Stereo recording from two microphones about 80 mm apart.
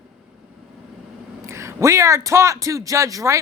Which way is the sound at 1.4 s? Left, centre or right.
Right.